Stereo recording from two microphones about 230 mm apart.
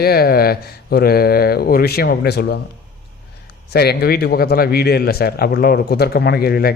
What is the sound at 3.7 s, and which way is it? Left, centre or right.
Speech, left.